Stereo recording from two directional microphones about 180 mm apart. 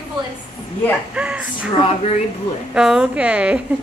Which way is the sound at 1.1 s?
5° right (ahead or behind).